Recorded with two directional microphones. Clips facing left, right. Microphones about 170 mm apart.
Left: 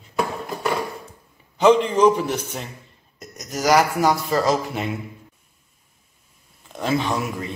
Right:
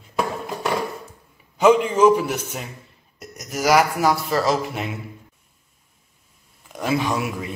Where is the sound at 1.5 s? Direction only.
10° right (ahead or behind).